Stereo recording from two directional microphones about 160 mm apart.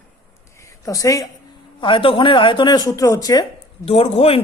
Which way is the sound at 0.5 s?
20° left (ahead or behind).